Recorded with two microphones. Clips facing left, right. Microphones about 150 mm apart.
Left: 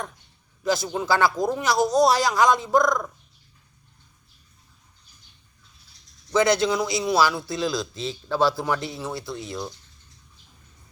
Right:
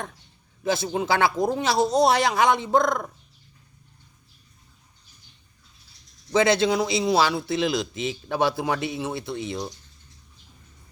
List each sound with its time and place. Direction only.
0.6 s a man's voice: 20° right (ahead or behind)
6.5 s a man's voice: 25° right (ahead or behind)